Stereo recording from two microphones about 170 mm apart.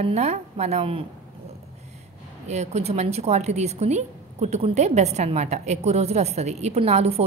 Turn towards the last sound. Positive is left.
turn(degrees=-40)  # may be behind; listen again after turning